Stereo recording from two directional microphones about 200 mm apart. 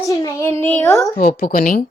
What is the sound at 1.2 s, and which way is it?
Speech, 45° left (ahead or behind).